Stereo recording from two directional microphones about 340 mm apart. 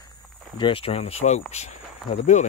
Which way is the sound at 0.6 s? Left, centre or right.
Centre.